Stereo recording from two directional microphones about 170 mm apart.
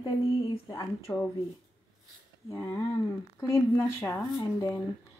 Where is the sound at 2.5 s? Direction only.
15° left (ahead or behind).